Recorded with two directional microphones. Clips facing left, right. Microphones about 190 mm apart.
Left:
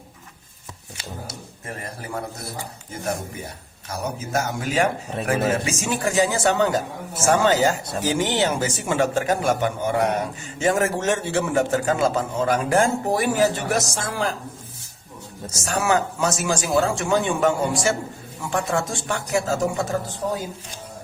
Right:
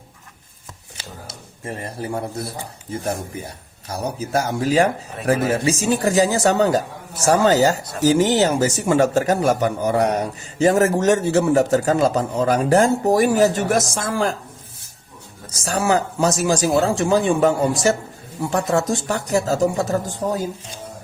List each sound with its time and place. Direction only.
1.6 s a man's voice: 30° right (ahead or behind)
3.8 s a man's voice: 35° right (ahead or behind)
15.4 s a man's voice: 35° right (ahead or behind)